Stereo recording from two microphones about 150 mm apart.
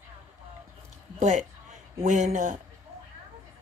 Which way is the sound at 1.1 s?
55° right (ahead or behind).